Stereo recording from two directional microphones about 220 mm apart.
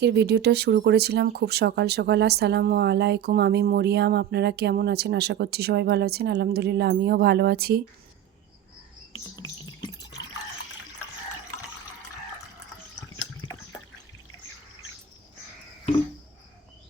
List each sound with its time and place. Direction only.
0.0 s speech: 50° right (ahead or behind)
9.3 s drip: 20° left (ahead or behind)